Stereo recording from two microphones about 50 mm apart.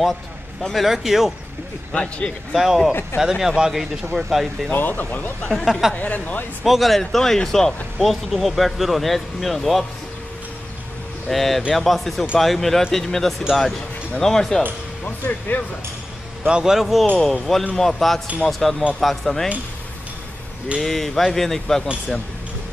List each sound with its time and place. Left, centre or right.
0.6 s speech: centre
2.5 s speech: centre
2.9 s speech: left
3.2 s speech: centre
4.7 s speech: left
5.7 s speech: centre
5.9 s speech: left
6.6 s speech: centre
11.2 s speech: centre
15.0 s speech: left
16.4 s speech: centre
17.2 s speech: centre
20.8 s speech: centre